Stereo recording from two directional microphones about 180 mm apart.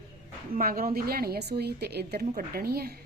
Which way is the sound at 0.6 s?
55° right (ahead or behind).